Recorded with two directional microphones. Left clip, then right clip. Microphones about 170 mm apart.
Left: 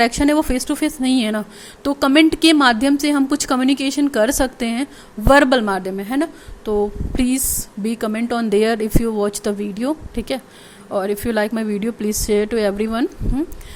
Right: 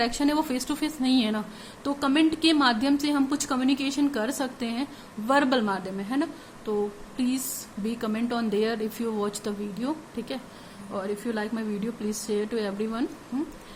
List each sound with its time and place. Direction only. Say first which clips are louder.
0.0 s speech: left 9 dB; 40° left (ahead or behind)